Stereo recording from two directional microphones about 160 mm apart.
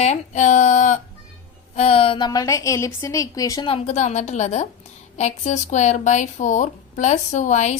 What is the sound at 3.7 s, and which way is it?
Speech, 40° left (ahead or behind).